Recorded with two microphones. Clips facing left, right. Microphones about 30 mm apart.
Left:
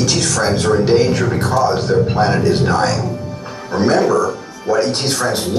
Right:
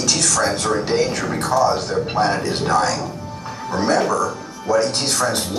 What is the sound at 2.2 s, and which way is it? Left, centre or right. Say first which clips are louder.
Speech: left 5 dB; centre.